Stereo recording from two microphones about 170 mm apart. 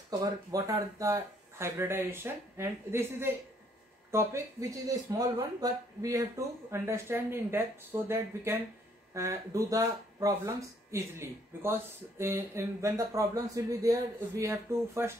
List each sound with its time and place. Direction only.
0.2 s speech: 20° right (ahead or behind)